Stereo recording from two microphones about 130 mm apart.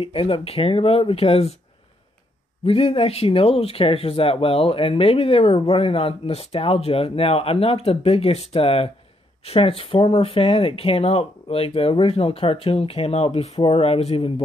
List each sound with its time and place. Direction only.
0.0 s speech: 45° left (ahead or behind)
2.6 s speech: 45° left (ahead or behind)